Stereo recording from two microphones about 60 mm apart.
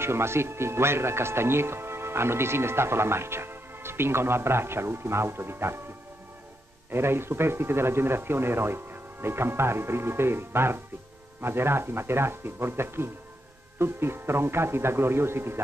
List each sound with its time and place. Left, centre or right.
0.0 s speech: right
6.9 s speech: right